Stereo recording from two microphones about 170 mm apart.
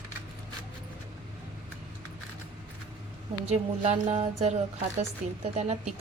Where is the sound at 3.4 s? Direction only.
45° right (ahead or behind).